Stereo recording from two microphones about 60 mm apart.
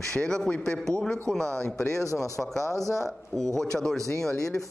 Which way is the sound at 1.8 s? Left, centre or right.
Left.